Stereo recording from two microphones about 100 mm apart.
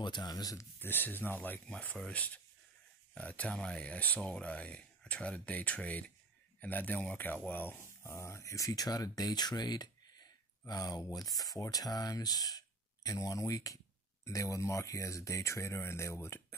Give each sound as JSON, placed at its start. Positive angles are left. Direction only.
{"t": 0.0, "sound": "speech", "side_deg": 45}
{"t": 0.7, "sound": "speech", "side_deg": 20}